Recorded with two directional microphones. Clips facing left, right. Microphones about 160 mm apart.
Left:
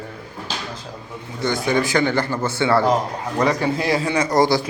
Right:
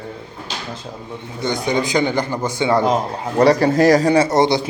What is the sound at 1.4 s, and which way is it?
Speech, 20° right (ahead or behind).